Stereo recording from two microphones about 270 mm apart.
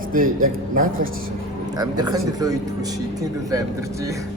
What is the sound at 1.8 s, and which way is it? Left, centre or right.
A man's voice, centre.